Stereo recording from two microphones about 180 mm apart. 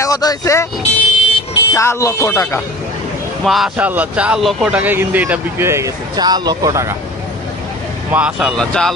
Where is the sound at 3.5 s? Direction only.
5° right (ahead or behind).